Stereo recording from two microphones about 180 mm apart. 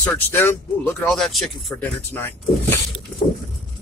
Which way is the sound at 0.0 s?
10° left (ahead or behind).